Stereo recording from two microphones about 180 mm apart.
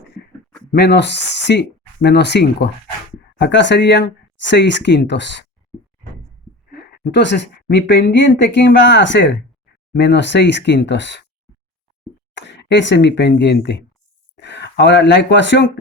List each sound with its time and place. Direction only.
0.7 s speech: 65° left (ahead or behind)
6.7 s a woman's voice: 65° left (ahead or behind); by 9.4 s 85° left
9.9 s speech: 75° left (ahead or behind)
12.3 s speech: 80° left